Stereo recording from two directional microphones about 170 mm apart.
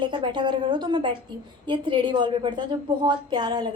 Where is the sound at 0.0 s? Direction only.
30° right (ahead or behind).